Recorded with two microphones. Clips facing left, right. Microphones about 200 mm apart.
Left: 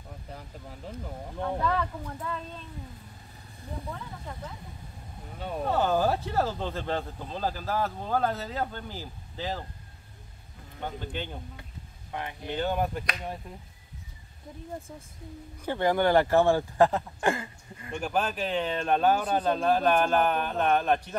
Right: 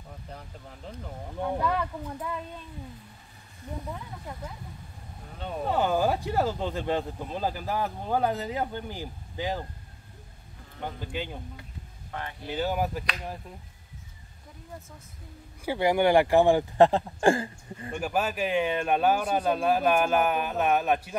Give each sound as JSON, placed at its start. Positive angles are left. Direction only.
{"t": 0.3, "sound": "speech", "side_deg": 5}
{"t": 1.4, "sound": "speech", "side_deg": -10}
{"t": 5.7, "sound": "speech", "side_deg": -15}
{"t": 10.8, "sound": "speech", "side_deg": -10}
{"t": 12.1, "sound": "speech", "side_deg": 15}
{"t": 12.4, "sound": "speech", "side_deg": -5}
{"t": 15.6, "sound": "speech", "side_deg": -10}
{"t": 17.9, "sound": "speech", "side_deg": -5}